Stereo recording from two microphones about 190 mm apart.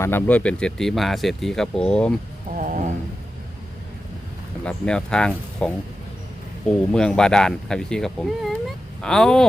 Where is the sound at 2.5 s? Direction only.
40° right (ahead or behind).